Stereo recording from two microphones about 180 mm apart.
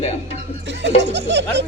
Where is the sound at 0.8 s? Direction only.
75° right (ahead or behind).